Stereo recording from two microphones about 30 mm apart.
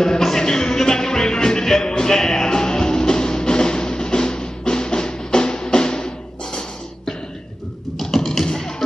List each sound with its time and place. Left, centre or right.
0.0 s music: centre
8.0 s beatboxing: centre
8.5 s music: centre